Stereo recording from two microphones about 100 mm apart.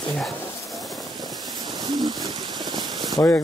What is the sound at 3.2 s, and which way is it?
Speech, 35° left (ahead or behind).